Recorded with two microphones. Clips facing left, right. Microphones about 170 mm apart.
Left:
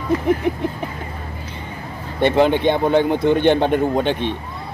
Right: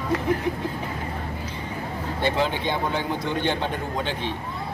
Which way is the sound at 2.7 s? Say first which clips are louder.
Left 10 dB; 60° left (ahead or behind).